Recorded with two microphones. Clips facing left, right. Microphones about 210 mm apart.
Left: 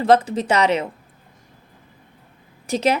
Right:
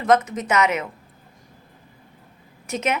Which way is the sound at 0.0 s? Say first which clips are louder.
Left 3 dB; 30° left (ahead or behind).